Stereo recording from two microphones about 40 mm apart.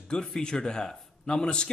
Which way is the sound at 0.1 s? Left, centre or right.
Centre.